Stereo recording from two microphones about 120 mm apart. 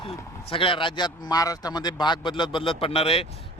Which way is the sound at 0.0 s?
45° left (ahead or behind).